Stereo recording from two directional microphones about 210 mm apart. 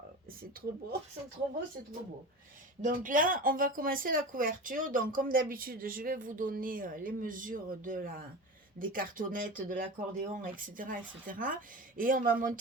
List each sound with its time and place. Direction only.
0.6 s speech: 45° right (ahead or behind)
2.8 s speech: 40° right (ahead or behind)